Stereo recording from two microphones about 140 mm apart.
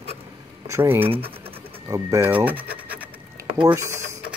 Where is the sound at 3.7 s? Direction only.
20° right (ahead or behind).